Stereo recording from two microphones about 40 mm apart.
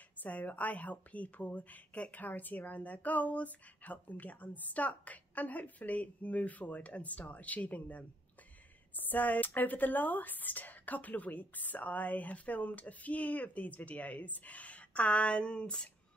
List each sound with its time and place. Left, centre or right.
0.2 s a woman's voice: left